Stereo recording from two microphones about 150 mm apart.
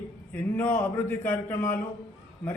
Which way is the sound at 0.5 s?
15° left (ahead or behind).